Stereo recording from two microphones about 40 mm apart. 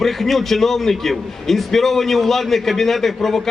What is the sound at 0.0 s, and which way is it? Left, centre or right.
A man's voice, centre.